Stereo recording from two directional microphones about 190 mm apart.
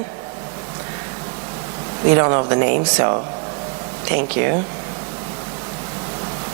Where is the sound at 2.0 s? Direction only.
25° right (ahead or behind).